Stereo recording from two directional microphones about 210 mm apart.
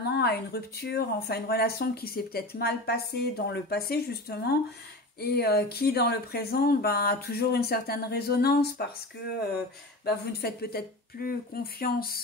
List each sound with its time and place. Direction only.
0.1 s speech: 50° left (ahead or behind)
10.0 s speech: 50° left (ahead or behind)